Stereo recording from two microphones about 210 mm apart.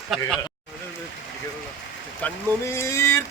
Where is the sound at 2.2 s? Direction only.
15° left (ahead or behind).